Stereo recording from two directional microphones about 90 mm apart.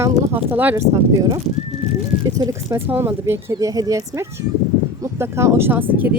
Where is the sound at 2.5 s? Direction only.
35° right (ahead or behind).